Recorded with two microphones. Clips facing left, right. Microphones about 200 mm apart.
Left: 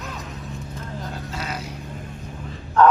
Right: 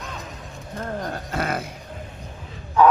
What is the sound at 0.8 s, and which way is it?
Vehicle, 55° right (ahead or behind).